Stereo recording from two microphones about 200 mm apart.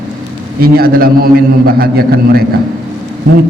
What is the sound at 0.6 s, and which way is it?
A man's voice, 45° right (ahead or behind).